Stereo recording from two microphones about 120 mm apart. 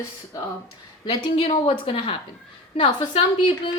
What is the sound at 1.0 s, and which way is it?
A woman's voice, 50° left (ahead or behind).